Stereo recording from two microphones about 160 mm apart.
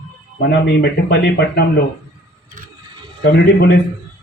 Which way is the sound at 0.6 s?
80° left.